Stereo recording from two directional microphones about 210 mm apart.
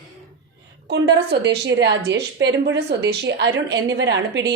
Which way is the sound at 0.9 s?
55° right (ahead or behind).